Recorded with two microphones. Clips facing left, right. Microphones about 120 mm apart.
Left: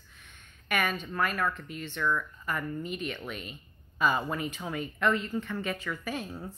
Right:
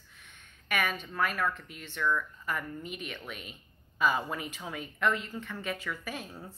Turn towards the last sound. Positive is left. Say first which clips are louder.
# left 4 dB
turn(degrees=0)  # may be behind; listen again after turning